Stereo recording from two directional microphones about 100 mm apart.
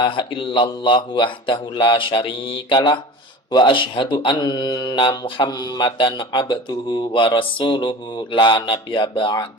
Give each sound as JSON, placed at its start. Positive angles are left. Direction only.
{"t": 0.0, "sound": "speech", "side_deg": 55}